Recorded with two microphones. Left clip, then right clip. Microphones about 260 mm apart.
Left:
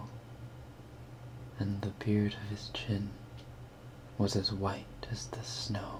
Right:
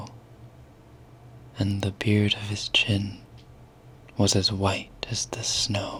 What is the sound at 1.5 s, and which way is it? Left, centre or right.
Speech, right.